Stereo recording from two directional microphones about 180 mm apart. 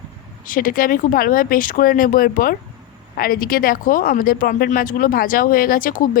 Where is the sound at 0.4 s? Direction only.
50° left (ahead or behind).